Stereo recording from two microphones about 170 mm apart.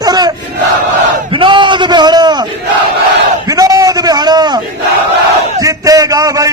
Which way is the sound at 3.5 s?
20° right (ahead or behind).